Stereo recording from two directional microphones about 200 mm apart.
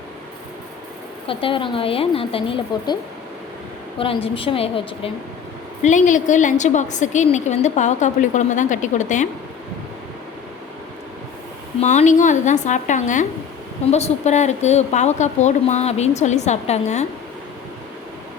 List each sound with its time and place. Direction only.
1.3 s speech: 25° left (ahead or behind)
5.8 s a woman's voice: 40° left (ahead or behind)
11.8 s a woman's voice: 35° left (ahead or behind)